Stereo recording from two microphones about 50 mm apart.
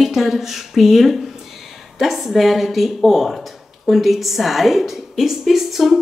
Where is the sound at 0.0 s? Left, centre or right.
Centre.